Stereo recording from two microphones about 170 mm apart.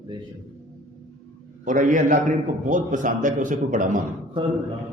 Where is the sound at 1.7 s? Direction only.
50° right (ahead or behind).